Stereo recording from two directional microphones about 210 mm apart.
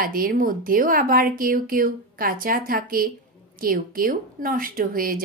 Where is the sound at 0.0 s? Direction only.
45° right (ahead or behind).